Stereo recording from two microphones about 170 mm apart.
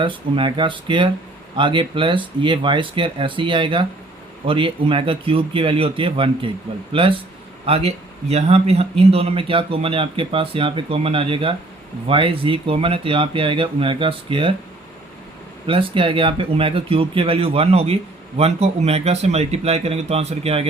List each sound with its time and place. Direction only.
0.0 s a man's voice: 30° right (ahead or behind)
15.6 s a man's voice: 30° right (ahead or behind)